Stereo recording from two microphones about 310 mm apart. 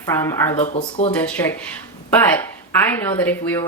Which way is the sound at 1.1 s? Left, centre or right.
Centre.